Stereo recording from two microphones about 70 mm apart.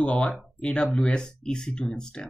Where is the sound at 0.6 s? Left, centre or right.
Centre.